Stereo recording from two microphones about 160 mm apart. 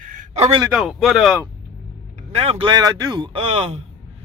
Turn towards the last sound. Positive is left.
turn(degrees=-35)  # may be behind; listen again after turning